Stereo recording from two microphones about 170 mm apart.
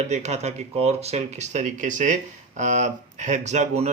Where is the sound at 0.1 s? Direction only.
40° right (ahead or behind).